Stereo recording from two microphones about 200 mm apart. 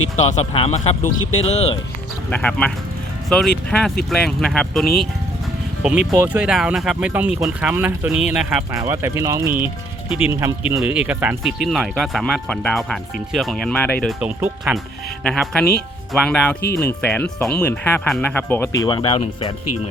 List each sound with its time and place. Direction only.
0.3 s speech: 30° left (ahead or behind)
2.3 s speech: 5° left (ahead or behind)
14.2 s speech: 5° right (ahead or behind); by 18.7 s 10° left (ahead or behind)
18.8 s speech: 20° left (ahead or behind)